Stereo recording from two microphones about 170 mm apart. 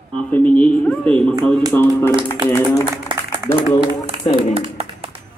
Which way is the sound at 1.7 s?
15° left (ahead or behind).